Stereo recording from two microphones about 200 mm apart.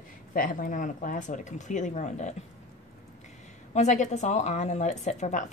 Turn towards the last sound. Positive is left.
turn(degrees=35)  # may be behind; listen again after turning